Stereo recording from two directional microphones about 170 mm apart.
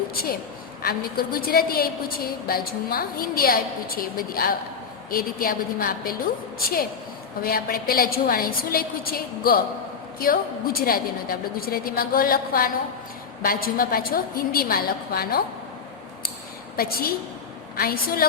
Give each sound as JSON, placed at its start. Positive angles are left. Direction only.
{"t": 0.8, "sound": "a woman's voice", "side_deg": 60}
{"t": 7.4, "sound": "a woman's voice", "side_deg": 60}
{"t": 16.7, "sound": "a woman's voice", "side_deg": 60}